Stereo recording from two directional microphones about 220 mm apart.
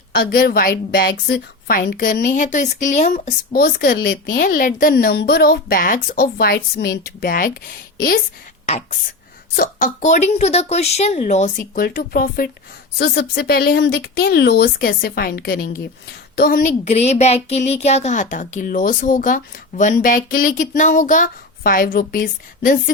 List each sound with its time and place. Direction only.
0.1 s a woman's voice: 45° left (ahead or behind)
9.6 s a woman's voice: 35° left (ahead or behind)
11.5 s a woman's voice: 45° left (ahead or behind)